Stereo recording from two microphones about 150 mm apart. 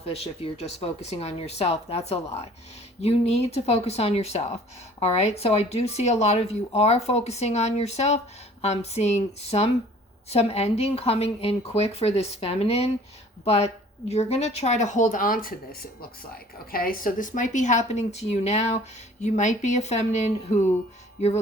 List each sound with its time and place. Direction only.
0.1 s a woman's voice: 40° left (ahead or behind)